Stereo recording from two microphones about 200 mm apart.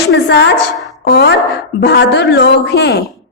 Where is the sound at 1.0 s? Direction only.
55° left (ahead or behind).